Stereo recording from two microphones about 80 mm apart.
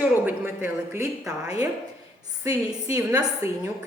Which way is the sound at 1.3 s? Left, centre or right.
Right.